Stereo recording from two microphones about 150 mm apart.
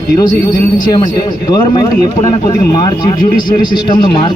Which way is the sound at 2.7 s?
25° left (ahead or behind).